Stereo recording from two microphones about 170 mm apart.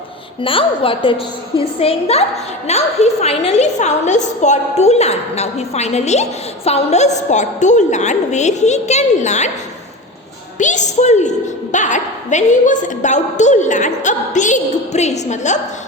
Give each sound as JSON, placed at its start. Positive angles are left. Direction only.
{"t": 0.4, "sound": "a woman's voice", "side_deg": 30}
{"t": 10.6, "sound": "a woman's voice", "side_deg": 45}